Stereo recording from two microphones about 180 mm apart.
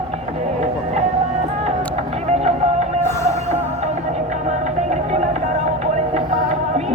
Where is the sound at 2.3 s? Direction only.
35° right (ahead or behind).